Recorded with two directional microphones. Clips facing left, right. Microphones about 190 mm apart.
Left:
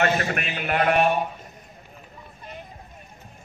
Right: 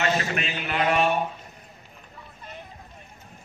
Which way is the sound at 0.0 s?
50° left (ahead or behind).